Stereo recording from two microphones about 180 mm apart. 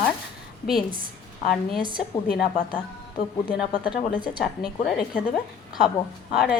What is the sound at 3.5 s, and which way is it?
A woman's voice, 5° right (ahead or behind).